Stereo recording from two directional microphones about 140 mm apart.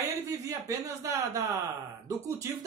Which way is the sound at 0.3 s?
25° right (ahead or behind).